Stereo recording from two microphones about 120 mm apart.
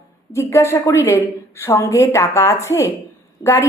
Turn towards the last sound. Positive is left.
turn(degrees=35)  # may be behind; listen again after turning